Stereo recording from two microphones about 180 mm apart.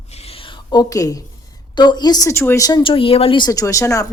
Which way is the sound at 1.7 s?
25° left (ahead or behind).